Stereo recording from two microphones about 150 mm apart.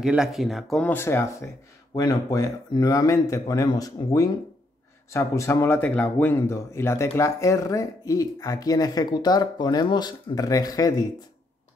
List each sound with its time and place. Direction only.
0.0 s speech: 5° right (ahead or behind)
0.8 s speech: 15° left (ahead or behind)